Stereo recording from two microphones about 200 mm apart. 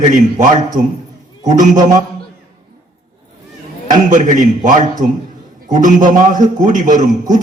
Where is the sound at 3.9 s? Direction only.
40° right (ahead or behind).